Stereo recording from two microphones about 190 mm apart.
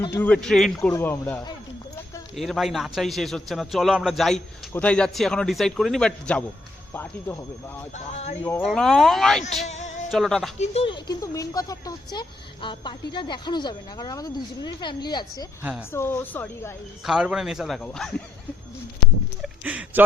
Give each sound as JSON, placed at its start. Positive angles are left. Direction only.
{"t": 0.1, "sound": "a man's voice", "side_deg": 10}
{"t": 0.8, "sound": "speech", "side_deg": 15}
{"t": 2.3, "sound": "a man's voice", "side_deg": 0}
{"t": 7.9, "sound": "speech", "side_deg": 35}
{"t": 8.6, "sound": "a man's voice", "side_deg": 0}
{"t": 9.6, "sound": "music", "side_deg": 35}
{"t": 10.1, "sound": "a man's voice", "side_deg": 0}
{"t": 10.6, "sound": "speech", "side_deg": 30}
{"t": 17.1, "sound": "a man's voice", "side_deg": -5}
{"t": 19.4, "sound": "a sound", "side_deg": -5}